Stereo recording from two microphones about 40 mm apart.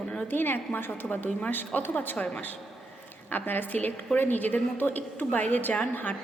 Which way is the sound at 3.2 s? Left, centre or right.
Left.